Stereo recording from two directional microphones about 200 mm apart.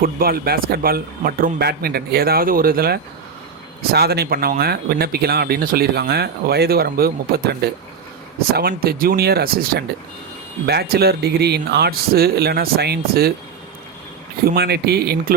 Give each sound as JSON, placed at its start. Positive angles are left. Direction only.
{"t": 0.0, "sound": "speech", "side_deg": -50}
{"t": 14.4, "sound": "speech", "side_deg": -50}